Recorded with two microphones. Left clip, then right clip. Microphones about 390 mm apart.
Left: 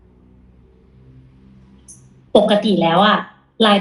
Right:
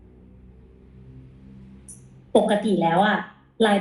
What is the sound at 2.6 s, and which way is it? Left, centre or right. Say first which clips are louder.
A woman's voice: left 6 dB; left.